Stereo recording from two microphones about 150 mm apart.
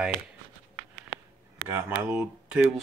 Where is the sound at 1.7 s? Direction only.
15° right (ahead or behind).